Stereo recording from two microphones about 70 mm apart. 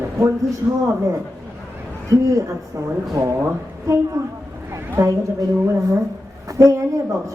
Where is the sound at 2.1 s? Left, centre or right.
Right.